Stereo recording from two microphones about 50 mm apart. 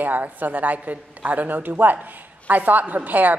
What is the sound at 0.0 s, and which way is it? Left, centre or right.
A woman's voice, right.